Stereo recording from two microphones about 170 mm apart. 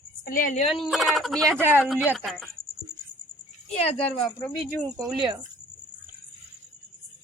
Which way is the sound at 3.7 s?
40° left (ahead or behind).